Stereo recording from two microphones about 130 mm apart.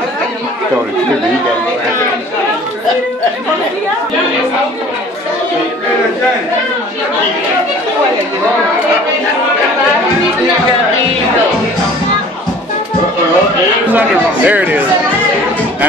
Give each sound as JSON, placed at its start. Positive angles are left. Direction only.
{"t": 13.9, "sound": "speech", "side_deg": -10}